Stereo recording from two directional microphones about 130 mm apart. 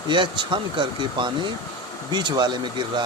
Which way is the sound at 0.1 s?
40° right (ahead or behind).